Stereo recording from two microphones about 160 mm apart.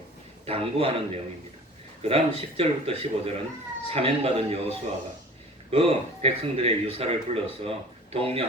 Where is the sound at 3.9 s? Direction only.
35° right (ahead or behind).